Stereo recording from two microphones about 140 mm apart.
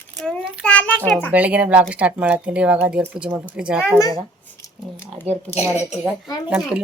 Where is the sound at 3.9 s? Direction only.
25° left (ahead or behind).